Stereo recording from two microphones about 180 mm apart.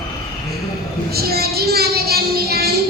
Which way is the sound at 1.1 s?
60° right (ahead or behind).